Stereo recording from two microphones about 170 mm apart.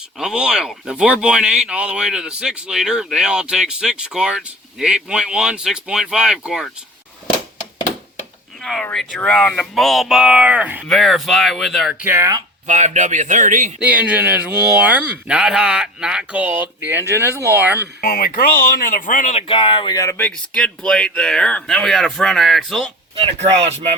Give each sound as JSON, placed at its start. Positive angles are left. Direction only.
{"t": 0.2, "sound": "speech", "side_deg": -5}
{"t": 8.6, "sound": "speech", "side_deg": 5}
{"t": 12.0, "sound": "speech", "side_deg": -15}
{"t": 12.6, "sound": "a man's voice", "side_deg": -45}
{"t": 13.7, "sound": "speech", "side_deg": -10}
{"t": 18.0, "sound": "speech", "side_deg": 55}
{"t": 23.1, "sound": "speech", "side_deg": -35}